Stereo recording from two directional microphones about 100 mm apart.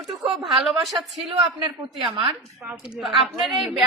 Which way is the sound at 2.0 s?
55° right (ahead or behind).